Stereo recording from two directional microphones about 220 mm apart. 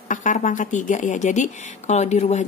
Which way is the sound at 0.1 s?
35° left (ahead or behind).